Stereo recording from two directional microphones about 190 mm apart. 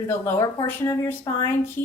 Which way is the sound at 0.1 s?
15° left (ahead or behind).